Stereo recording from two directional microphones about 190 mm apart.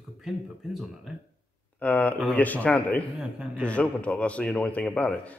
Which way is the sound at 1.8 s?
10° left (ahead or behind).